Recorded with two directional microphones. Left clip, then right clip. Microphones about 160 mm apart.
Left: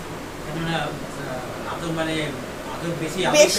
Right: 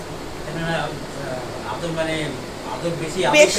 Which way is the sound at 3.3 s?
10° left (ahead or behind).